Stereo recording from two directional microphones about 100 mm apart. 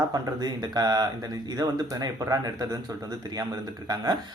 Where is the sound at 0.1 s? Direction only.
40° right (ahead or behind).